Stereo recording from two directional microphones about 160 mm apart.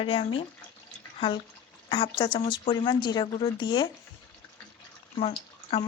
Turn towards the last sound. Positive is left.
turn(degrees=40)  # may be behind; listen again after turning